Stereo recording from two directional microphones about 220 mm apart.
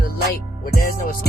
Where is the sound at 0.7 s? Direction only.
45° left (ahead or behind).